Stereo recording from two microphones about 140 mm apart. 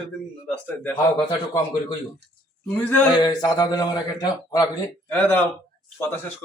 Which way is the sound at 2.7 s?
10° left (ahead or behind).